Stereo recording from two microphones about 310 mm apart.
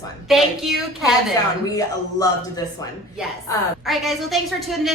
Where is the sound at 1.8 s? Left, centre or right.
Centre.